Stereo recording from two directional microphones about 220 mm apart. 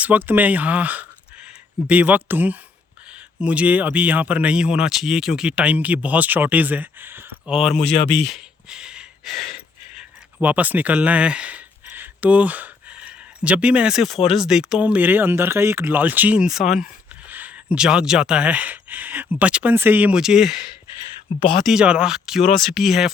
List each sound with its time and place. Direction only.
0.0 s speech: 5° right (ahead or behind)
7.9 s speech: 25° left (ahead or behind)
8.2 s speech: centre (ahead or behind)
10.0 s a sound: 5° right (ahead or behind)
14.3 s speech: centre (ahead or behind)
21.3 s speech: 30° left (ahead or behind)
21.7 s speech: 5° right (ahead or behind)